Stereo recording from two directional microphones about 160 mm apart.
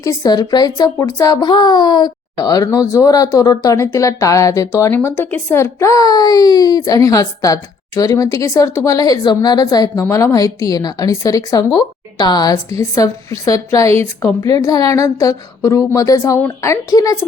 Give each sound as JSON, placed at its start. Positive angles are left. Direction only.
{"t": 0.0, "sound": "a child's voice", "side_deg": 20}